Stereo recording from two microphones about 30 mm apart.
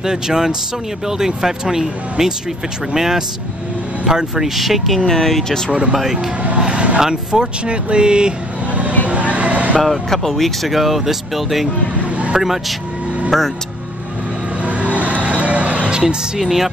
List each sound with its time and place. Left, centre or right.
0.0 s speech: right
4.4 s speech: centre
5.7 s speech: right
6.6 s vehicle: right
7.0 s speech: right
7.6 s speech: right
9.0 s a sound: right
9.8 s speech: centre
10.8 s speech: centre
13.3 s speech: centre
14.6 s vehicle: right
15.2 s music: right
15.9 s music: right
16.3 s speech: centre